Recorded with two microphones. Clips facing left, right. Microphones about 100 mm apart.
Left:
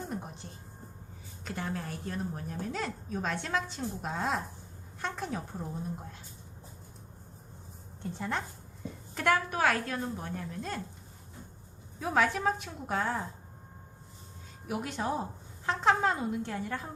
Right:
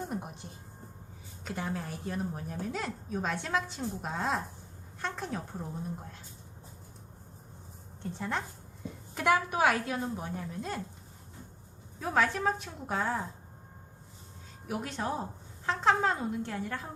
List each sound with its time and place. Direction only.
0.1 s music: 10° right (ahead or behind)
1.5 s a woman's voice: 5° right (ahead or behind)
4.9 s a sound: centre (ahead or behind)
8.1 s a woman's voice: centre (ahead or behind)
9.1 s a woman's voice: 10° right (ahead or behind)
11.9 s a woman's voice: centre (ahead or behind)
14.7 s a woman's voice: centre (ahead or behind)